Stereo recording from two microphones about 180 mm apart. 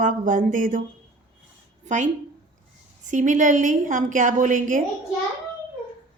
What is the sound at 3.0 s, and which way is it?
A woman's voice, 45° right (ahead or behind).